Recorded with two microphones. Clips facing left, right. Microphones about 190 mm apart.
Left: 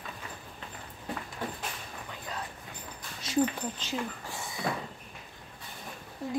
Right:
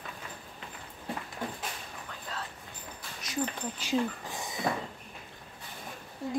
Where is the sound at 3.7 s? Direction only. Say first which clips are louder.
Right 5 dB; 15° right (ahead or behind).